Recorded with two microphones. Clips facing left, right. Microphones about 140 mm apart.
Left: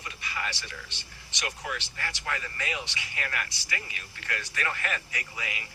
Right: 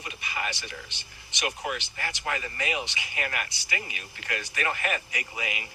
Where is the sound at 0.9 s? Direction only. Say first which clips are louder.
Even; 15° right (ahead or behind).